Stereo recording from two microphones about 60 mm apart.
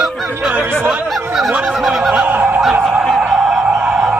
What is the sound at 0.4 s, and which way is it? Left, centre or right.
Music, right.